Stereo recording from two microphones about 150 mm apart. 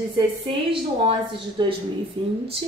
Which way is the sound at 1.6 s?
30° right (ahead or behind).